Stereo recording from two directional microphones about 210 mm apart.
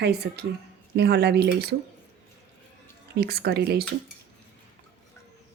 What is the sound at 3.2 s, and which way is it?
Speech, 50° right (ahead or behind).